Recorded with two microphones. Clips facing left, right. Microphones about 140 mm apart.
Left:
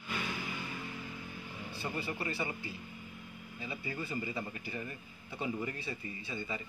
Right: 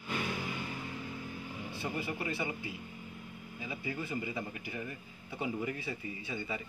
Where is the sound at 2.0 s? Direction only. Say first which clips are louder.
Right 1 dB; 10° right (ahead or behind).